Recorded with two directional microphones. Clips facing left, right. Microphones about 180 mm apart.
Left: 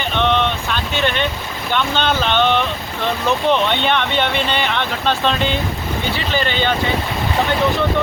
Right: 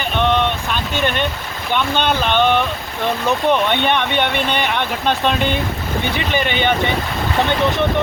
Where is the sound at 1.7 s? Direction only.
10° right (ahead or behind).